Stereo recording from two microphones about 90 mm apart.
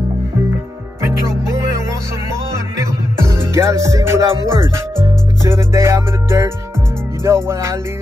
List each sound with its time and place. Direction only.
3.2 s music: 30° right (ahead or behind)
4.5 s speech: 30° right (ahead or behind)
7.2 s music: 30° right (ahead or behind)